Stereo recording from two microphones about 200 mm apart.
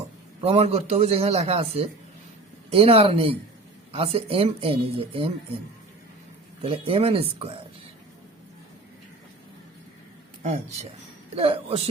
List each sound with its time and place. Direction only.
0.4 s a man's voice: 30° right (ahead or behind)
6.7 s speech: 25° right (ahead or behind)
11.3 s speech: 30° right (ahead or behind)